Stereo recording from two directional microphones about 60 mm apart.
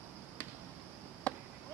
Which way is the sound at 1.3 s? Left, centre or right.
Left.